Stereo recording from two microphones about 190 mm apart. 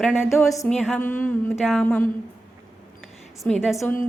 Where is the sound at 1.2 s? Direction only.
10° left (ahead or behind).